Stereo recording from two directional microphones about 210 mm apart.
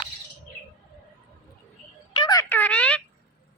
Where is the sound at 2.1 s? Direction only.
20° left (ahead or behind).